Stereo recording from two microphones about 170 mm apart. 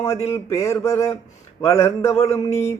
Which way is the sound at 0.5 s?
15° left (ahead or behind).